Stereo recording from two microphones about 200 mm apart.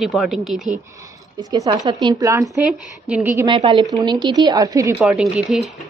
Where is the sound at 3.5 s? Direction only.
25° right (ahead or behind); by 5.6 s 5° right (ahead or behind).